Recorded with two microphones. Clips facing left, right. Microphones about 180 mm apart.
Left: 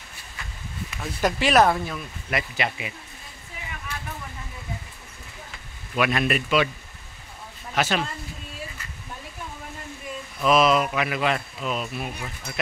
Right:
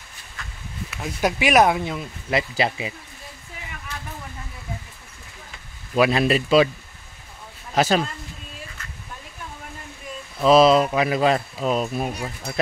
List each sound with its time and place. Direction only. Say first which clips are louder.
0.8 s speech: right 1 dB; 10° right (ahead or behind)
2.5 s speech: right 5 dB; 30° right (ahead or behind)
5.9 s speech: right 5 dB; 30° right (ahead or behind)
7.7 s speech: right 5 dB; 35° right (ahead or behind)
10.4 s speech: right 5 dB; 30° right (ahead or behind)